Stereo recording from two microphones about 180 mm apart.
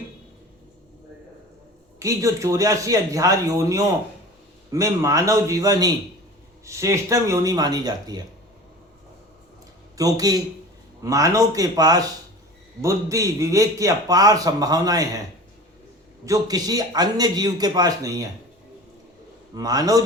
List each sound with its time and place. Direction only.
2.0 s a man's voice: 15° right (ahead or behind)
10.0 s a man's voice: 20° right (ahead or behind)
16.2 s a man's voice: 20° right (ahead or behind)
19.5 s a man's voice: 20° right (ahead or behind)